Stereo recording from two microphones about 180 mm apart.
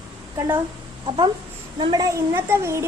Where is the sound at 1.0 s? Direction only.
30° right (ahead or behind).